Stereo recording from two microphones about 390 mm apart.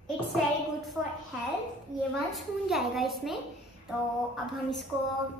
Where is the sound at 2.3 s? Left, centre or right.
Centre.